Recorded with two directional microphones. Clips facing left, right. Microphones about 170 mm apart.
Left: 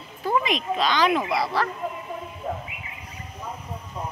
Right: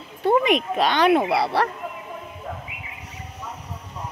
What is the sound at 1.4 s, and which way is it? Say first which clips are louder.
Speech: right 3 dB; 65° right (ahead or behind).